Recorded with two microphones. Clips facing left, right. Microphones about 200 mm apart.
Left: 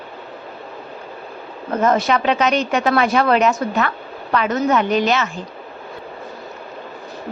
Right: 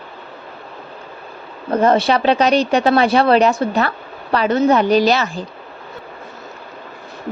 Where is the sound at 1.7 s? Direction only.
30° right (ahead or behind).